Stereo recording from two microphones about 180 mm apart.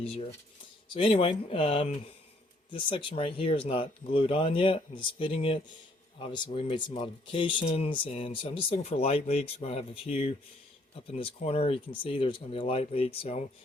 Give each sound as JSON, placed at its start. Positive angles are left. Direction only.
{"t": 0.0, "sound": "speech", "side_deg": 30}